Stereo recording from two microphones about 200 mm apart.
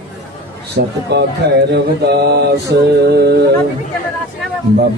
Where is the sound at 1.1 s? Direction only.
55° right (ahead or behind).